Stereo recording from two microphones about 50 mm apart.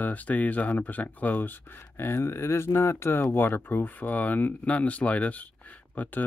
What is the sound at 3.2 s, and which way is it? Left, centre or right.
Speech, left.